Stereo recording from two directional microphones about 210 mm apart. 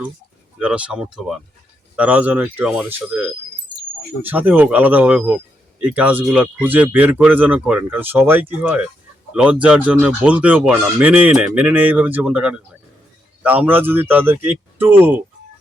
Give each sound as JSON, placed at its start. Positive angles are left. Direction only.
{"t": 0.6, "sound": "speech", "side_deg": -5}